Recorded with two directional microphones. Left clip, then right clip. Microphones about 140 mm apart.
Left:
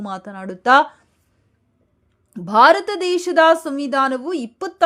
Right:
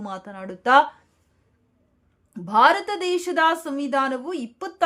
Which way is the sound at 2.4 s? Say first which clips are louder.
Left 5 dB; 35° left (ahead or behind).